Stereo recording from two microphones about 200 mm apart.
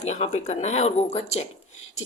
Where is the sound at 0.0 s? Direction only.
35° left (ahead or behind).